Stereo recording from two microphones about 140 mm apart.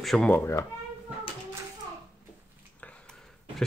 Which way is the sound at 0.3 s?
15° left (ahead or behind).